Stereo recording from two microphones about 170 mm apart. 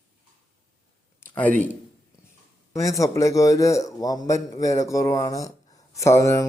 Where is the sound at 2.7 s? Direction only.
20° left (ahead or behind).